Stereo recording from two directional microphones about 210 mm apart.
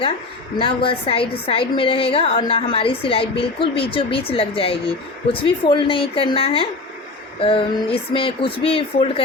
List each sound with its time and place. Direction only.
0.6 s a woman's voice: 25° left (ahead or behind)